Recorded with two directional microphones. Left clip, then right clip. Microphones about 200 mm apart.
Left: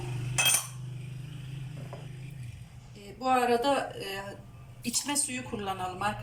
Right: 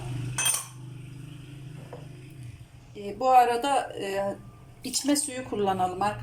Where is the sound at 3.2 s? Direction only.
40° right (ahead or behind).